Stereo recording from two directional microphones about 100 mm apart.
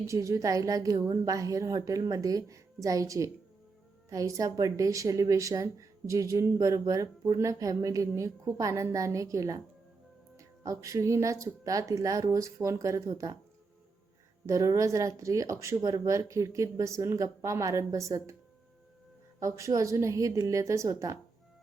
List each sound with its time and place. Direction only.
0.1 s speech: 30° right (ahead or behind)
14.4 s speech: 35° right (ahead or behind)
19.4 s speech: 30° right (ahead or behind)